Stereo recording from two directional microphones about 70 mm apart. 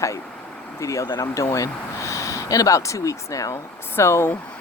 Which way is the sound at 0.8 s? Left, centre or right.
Left.